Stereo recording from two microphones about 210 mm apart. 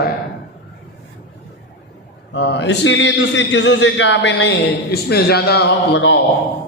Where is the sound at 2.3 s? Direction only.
55° left (ahead or behind).